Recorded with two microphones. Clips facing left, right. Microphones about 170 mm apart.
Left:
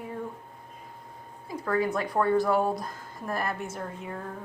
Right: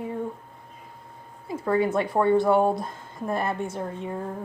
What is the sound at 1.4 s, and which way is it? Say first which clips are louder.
Speech: right 4 dB; 25° right (ahead or behind).